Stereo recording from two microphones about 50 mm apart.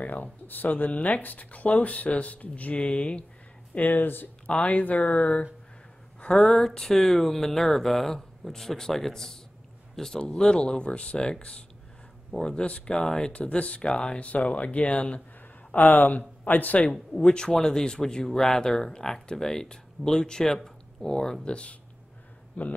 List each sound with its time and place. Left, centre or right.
0.0 s speech: left
3.7 s speech: left
6.2 s speech: centre
15.7 s speech: left
17.1 s speech: centre